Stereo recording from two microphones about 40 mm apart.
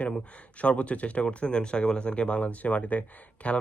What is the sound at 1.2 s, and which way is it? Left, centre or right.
Speech, left.